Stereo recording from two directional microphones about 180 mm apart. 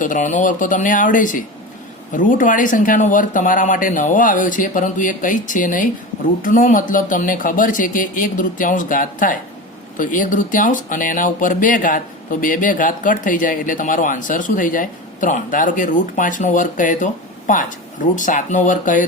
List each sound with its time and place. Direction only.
0.0 s speech: 45° left (ahead or behind)